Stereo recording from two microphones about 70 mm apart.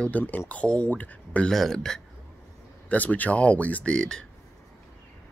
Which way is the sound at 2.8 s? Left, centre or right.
Left.